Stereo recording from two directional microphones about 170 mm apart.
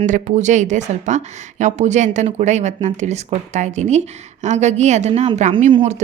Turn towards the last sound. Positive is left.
turn(degrees=-30)  # may be behind; listen again after turning